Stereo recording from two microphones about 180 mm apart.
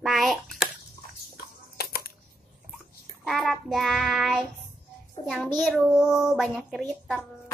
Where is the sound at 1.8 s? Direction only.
60° left (ahead or behind).